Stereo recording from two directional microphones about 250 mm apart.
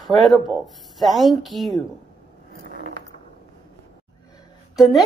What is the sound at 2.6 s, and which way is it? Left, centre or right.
Mechanisms, right.